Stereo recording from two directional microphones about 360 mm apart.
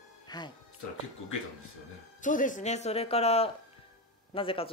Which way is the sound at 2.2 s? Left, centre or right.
Left.